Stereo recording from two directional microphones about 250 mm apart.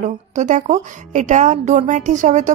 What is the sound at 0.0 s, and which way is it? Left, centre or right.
A woman's voice, right.